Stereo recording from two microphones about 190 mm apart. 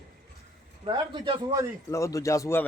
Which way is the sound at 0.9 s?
25° right (ahead or behind).